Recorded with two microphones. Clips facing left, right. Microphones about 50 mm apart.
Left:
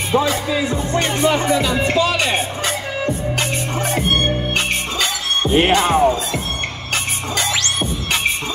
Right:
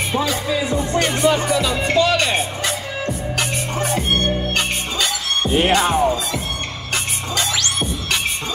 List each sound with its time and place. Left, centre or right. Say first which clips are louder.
0.1 s speech: left 5 dB; left
2.0 s speech: right 4 dB; centre
5.4 s music: left 2 dB; left